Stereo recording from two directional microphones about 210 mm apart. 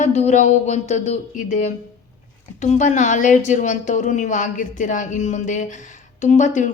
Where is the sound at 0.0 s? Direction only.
35° left (ahead or behind).